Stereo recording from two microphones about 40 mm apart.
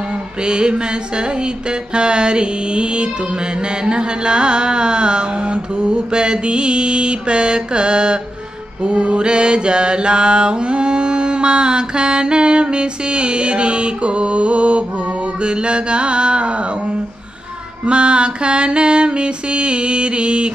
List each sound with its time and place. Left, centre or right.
0.4 s mantra: right
17.8 s mantra: right